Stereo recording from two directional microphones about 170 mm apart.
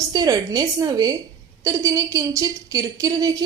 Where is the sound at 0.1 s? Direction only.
20° right (ahead or behind).